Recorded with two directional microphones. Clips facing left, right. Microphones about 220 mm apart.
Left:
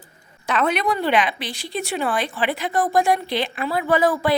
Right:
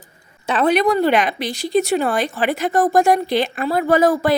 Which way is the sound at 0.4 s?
35° right (ahead or behind).